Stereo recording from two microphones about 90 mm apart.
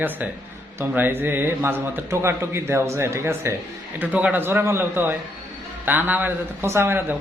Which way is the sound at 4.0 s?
15° right (ahead or behind).